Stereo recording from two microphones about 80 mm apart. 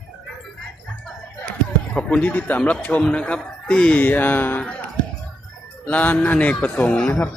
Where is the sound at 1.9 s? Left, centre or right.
Centre.